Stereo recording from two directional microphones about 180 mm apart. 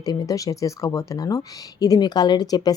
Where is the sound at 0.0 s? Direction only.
20° left (ahead or behind).